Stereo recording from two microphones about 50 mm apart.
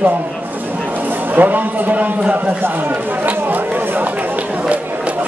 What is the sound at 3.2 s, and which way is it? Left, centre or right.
Chatter, right.